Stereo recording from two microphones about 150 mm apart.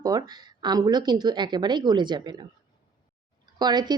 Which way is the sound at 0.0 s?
25° right (ahead or behind).